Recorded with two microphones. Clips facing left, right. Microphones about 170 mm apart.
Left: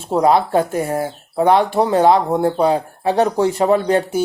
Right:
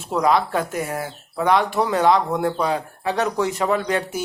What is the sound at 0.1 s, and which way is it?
Speech, 30° left (ahead or behind).